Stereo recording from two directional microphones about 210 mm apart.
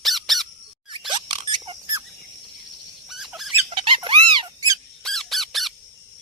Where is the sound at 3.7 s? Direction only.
25° right (ahead or behind).